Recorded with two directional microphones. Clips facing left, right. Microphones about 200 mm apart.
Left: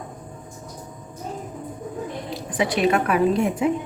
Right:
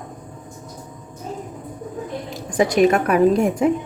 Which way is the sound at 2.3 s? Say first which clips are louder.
Right 5 dB; 45° right (ahead or behind).